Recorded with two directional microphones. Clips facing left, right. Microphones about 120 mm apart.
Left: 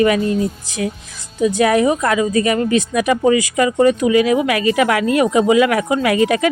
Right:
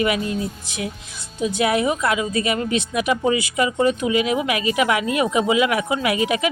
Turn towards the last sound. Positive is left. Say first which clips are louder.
# left 5 dB
turn(degrees=40)  # may be behind; listen again after turning